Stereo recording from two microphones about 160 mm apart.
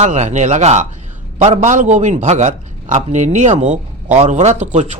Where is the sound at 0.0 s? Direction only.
45° right (ahead or behind).